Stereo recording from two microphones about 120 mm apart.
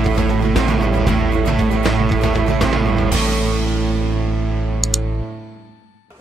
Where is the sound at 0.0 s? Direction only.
Centre (ahead or behind).